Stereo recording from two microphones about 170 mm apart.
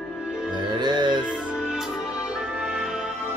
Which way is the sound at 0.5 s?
25° right (ahead or behind).